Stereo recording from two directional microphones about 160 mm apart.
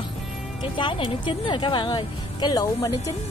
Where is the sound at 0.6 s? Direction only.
30° left (ahead or behind).